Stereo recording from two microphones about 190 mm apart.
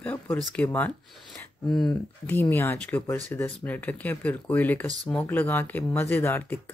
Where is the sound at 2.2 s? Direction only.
10° left (ahead or behind).